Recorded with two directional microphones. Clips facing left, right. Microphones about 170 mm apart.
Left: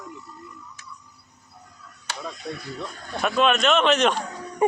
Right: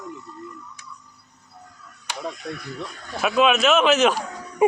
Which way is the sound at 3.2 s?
5° right (ahead or behind).